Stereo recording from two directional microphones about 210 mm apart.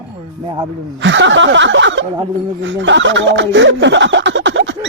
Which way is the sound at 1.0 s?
60° right (ahead or behind).